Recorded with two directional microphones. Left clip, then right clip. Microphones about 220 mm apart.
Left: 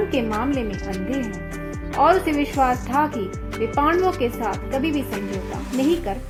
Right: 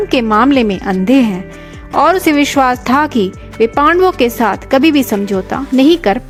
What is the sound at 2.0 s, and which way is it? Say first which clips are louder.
A woman's voice: right 7 dB; 45° right (ahead or behind).